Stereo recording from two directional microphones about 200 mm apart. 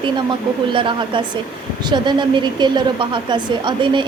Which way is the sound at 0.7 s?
25° right (ahead or behind).